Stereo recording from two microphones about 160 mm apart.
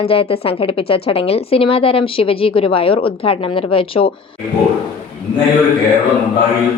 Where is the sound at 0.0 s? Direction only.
35° left (ahead or behind).